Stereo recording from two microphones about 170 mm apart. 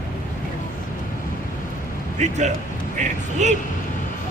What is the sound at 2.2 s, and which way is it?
Speech, 45° right (ahead or behind).